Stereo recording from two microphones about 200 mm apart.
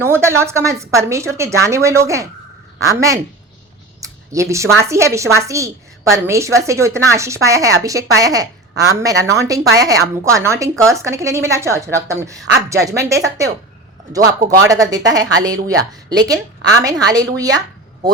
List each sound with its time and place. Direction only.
0.0 s a woman's voice: 10° right (ahead or behind)
4.0 s a sound: 15° right (ahead or behind)
4.8 s a woman's voice: 15° right (ahead or behind)